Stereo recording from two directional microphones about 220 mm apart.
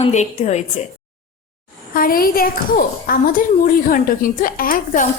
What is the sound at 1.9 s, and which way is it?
Speech, 40° left (ahead or behind).